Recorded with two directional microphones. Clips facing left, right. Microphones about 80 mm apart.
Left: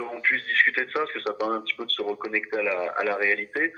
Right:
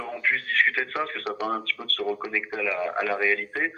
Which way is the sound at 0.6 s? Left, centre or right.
Left.